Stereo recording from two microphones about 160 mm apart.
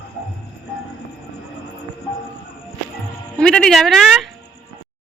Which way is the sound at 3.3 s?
5° left (ahead or behind).